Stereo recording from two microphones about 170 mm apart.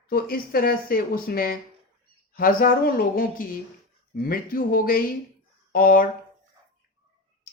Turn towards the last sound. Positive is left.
turn(degrees=55)  # may be behind; listen again after turning